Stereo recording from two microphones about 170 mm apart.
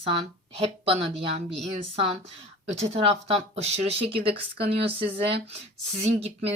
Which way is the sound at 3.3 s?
40° right (ahead or behind).